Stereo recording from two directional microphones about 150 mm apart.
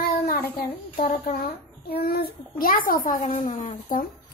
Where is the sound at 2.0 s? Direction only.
90° left.